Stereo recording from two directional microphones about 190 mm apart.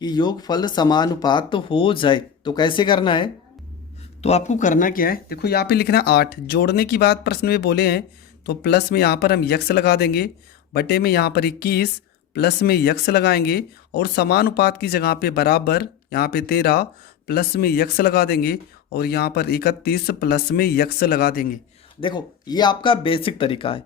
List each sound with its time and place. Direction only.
0.0 s speech: 20° left (ahead or behind); by 21.6 s 50° left (ahead or behind)
22.0 s speech: 20° left (ahead or behind)